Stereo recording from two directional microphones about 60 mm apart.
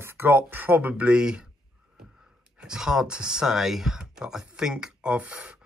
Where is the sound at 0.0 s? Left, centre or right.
Right.